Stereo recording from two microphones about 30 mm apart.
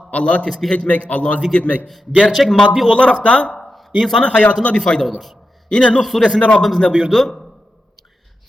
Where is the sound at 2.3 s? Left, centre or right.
Centre.